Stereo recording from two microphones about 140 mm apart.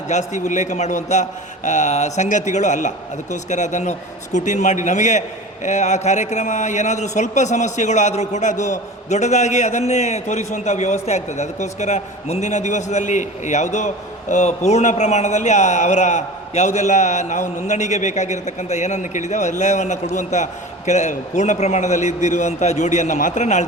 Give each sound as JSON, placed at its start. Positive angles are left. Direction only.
{"t": 0.1, "sound": "a man's voice", "side_deg": 60}